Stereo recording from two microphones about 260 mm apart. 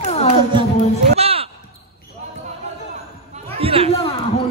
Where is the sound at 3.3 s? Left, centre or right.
Right.